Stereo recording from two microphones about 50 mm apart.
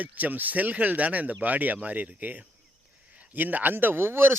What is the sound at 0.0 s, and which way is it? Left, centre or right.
Speech, right.